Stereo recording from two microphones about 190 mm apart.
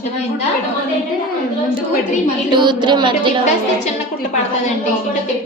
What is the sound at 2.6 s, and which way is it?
Speech, 25° right (ahead or behind).